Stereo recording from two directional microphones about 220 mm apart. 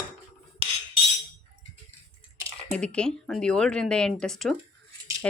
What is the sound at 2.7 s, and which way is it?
Speech, 5° left (ahead or behind).